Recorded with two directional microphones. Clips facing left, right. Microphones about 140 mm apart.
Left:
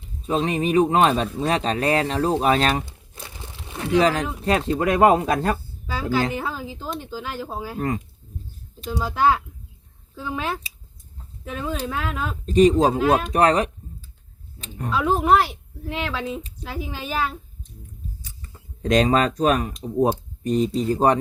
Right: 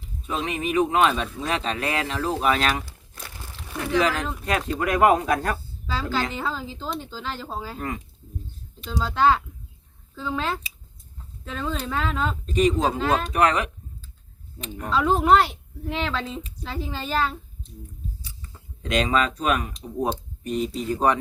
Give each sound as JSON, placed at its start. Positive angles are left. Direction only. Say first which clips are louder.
{"t": 0.3, "sound": "speech", "louder": "left 5 dB", "side_deg": 35}
{"t": 2.8, "sound": "crumpling", "louder": "left 1 dB", "side_deg": 20}
{"t": 4.4, "sound": "speech", "louder": "left 4 dB", "side_deg": 30}
{"t": 5.9, "sound": "speech", "louder": "left 4 dB", "side_deg": 10}
{"t": 7.8, "sound": "speech", "louder": "left 9 dB", "side_deg": 35}
{"t": 8.9, "sound": "speech", "louder": "even", "side_deg": 10}
{"t": 12.5, "sound": "speech", "louder": "left 6 dB", "side_deg": 35}
{"t": 13.0, "sound": "speech", "louder": "left 4 dB", "side_deg": 10}
{"t": 13.3, "sound": "speech", "louder": "left 3 dB", "side_deg": 35}
{"t": 14.8, "sound": "speech", "louder": "even", "side_deg": 5}
{"t": 18.8, "sound": "speech", "louder": "left 4 dB", "side_deg": 40}